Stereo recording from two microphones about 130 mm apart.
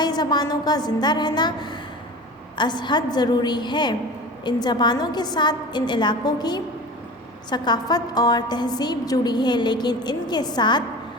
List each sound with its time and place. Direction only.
0.0 s a woman's voice: 30° left (ahead or behind)